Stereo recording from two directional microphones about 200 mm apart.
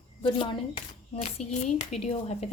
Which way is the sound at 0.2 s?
25° left (ahead or behind).